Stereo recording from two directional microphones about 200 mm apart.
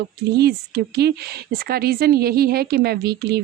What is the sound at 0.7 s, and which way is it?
Speech, 55° right (ahead or behind).